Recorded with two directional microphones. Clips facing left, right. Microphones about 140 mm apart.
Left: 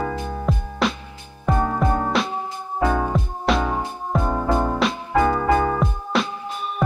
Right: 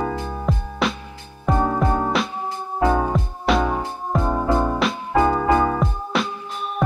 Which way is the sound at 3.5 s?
Centre (ahead or behind).